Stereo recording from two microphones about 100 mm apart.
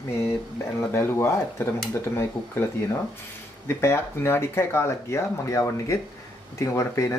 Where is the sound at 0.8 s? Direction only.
25° left (ahead or behind).